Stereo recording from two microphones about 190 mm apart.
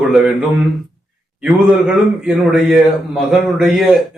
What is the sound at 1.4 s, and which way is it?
A man's voice, centre (ahead or behind).